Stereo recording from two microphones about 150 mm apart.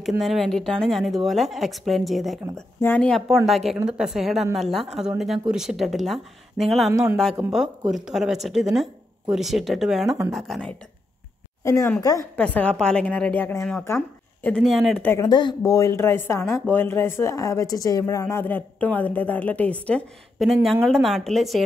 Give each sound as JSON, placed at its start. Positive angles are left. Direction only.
{"t": 0.2, "sound": "speech", "side_deg": 0}
{"t": 6.9, "sound": "a man's voice", "side_deg": -20}
{"t": 7.9, "sound": "speech", "side_deg": -5}
{"t": 11.6, "sound": "speech", "side_deg": 20}
{"t": 12.4, "sound": "a woman's voice", "side_deg": 10}
{"t": 13.8, "sound": "a sound", "side_deg": 15}
{"t": 14.5, "sound": "speech", "side_deg": 0}
{"t": 15.2, "sound": "speech", "side_deg": 30}
{"t": 18.2, "sound": "a woman's voice", "side_deg": 10}